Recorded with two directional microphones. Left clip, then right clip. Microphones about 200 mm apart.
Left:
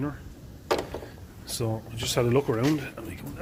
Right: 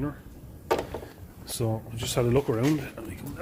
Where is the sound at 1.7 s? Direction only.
5° right (ahead or behind).